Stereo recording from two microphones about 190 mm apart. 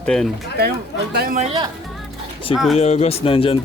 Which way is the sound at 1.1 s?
55° right (ahead or behind).